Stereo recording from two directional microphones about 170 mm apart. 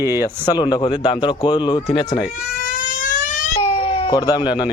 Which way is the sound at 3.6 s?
30° left (ahead or behind).